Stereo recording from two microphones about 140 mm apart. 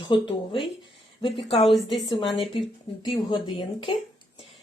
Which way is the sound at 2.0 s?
Centre (ahead or behind).